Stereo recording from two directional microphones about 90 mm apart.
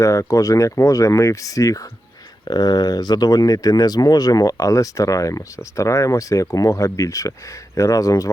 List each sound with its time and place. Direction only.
0.0 s speech: 35° left (ahead or behind)
2.4 s speech: 50° left (ahead or behind)